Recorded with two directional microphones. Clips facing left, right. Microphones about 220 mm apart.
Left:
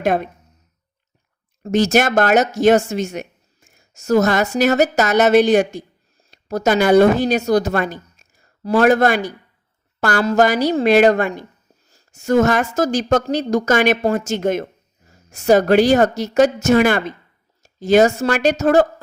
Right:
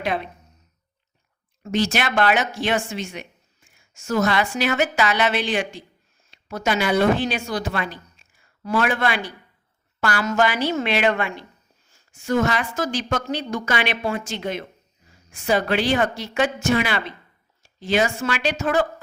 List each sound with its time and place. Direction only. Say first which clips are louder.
0.0 s speech: left 7 dB; 45° left (ahead or behind)
1.6 s a woman's voice: left 7 dB; 45° left (ahead or behind)